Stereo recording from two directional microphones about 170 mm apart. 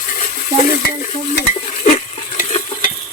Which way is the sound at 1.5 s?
45° left (ahead or behind).